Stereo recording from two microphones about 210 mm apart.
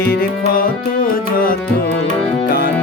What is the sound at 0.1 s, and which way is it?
Tabla, 45° left (ahead or behind).